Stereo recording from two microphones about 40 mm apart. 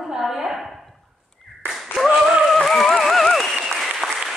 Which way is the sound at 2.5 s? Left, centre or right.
Centre.